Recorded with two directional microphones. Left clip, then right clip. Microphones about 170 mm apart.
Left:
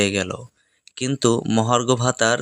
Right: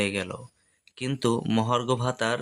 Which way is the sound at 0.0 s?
35° left (ahead or behind).